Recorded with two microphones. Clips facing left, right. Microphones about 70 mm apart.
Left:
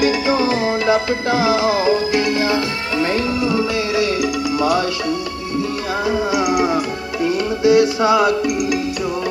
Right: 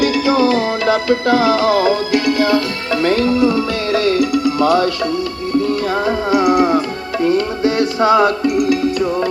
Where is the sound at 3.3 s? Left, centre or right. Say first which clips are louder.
Right 5 dB; right.